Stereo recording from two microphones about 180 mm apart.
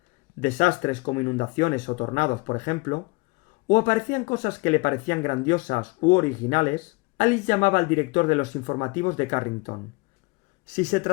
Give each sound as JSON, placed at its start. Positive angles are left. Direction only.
{"t": 0.3, "sound": "speech", "side_deg": 45}
{"t": 10.8, "sound": "speech", "side_deg": 45}